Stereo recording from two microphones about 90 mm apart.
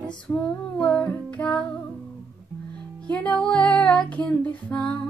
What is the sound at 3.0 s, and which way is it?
Music, 15° left (ahead or behind).